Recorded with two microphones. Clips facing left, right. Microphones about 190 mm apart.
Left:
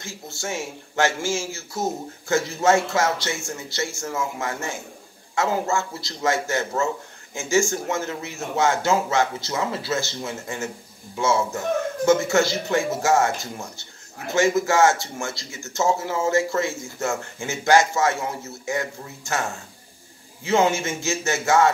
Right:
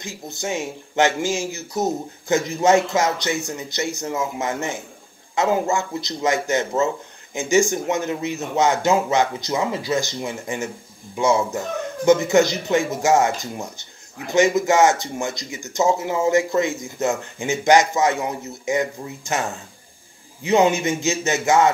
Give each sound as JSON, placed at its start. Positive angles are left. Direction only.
{"t": 0.0, "sound": "a man's voice", "side_deg": -20}
{"t": 20.4, "sound": "speech", "side_deg": -20}